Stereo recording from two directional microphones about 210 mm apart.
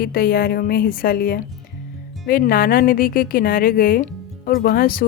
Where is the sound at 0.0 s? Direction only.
45° left (ahead or behind).